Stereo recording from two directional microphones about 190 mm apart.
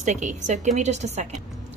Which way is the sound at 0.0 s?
40° right (ahead or behind).